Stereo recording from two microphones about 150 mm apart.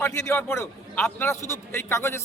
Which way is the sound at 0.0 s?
20° left (ahead or behind).